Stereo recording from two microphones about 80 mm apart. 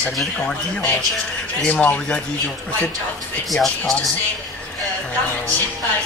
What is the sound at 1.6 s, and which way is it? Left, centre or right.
Speech, left.